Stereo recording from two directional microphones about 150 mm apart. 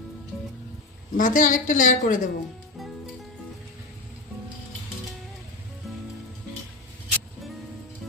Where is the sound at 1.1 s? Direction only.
60° left (ahead or behind).